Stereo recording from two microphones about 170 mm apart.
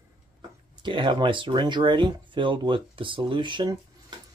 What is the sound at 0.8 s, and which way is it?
Speech, 30° right (ahead or behind).